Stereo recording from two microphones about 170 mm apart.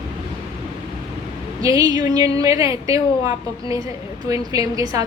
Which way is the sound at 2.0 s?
20° right (ahead or behind).